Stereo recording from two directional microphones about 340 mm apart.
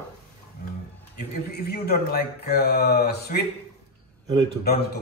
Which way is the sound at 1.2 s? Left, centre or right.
Left.